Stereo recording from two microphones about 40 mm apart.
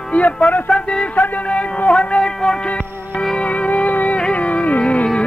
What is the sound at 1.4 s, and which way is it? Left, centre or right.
Speech, left.